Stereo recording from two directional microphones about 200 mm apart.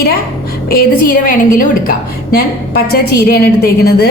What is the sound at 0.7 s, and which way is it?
Speech, 45° left (ahead or behind).